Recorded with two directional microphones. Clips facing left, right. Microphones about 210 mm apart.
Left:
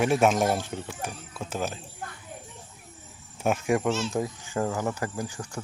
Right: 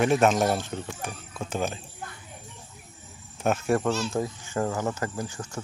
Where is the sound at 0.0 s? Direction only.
10° left (ahead or behind).